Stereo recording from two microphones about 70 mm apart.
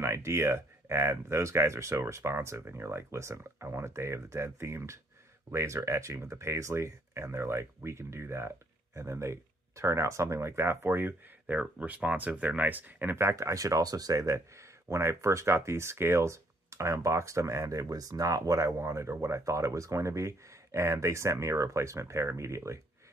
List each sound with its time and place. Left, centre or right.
0.0 s speech: right